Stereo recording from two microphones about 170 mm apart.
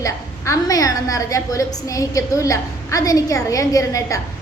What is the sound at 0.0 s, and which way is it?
A woman's voice, 20° left (ahead or behind).